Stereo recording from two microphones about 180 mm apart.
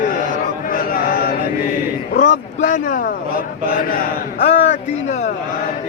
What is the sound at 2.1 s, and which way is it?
Speech, 45° left (ahead or behind).